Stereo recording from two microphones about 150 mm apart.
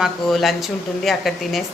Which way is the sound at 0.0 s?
Centre (ahead or behind).